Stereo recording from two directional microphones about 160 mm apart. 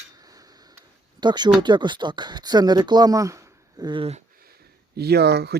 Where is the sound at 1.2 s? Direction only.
25° right (ahead or behind).